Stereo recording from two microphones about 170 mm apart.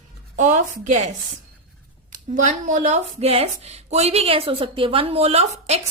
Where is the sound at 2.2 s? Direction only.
45° right (ahead or behind).